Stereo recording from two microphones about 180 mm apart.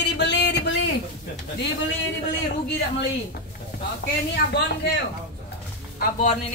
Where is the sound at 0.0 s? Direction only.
70° left (ahead or behind).